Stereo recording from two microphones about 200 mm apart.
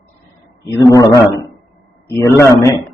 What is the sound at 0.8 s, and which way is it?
A man's voice, 20° left (ahead or behind).